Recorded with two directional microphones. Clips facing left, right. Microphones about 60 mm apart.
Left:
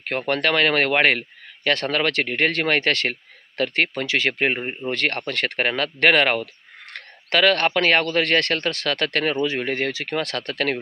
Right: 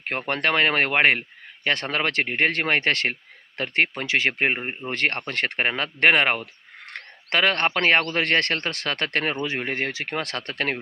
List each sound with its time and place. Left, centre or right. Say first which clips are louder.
0.0 s speech: left 3 dB; right